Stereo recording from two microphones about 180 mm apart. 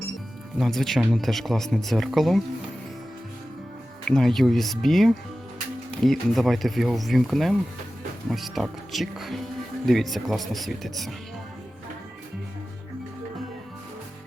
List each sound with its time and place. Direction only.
0.6 s speech: centre (ahead or behind)
4.0 s speech: 5° left (ahead or behind)